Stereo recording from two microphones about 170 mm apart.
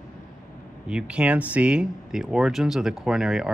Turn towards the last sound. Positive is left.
turn(degrees=-5)  # may be behind; listen again after turning